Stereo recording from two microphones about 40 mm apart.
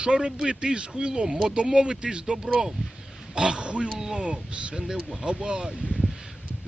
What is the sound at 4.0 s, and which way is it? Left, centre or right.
Speech, centre.